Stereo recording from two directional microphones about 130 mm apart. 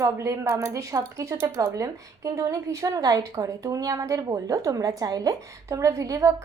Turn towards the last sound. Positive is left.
turn(degrees=-25)  # may be behind; listen again after turning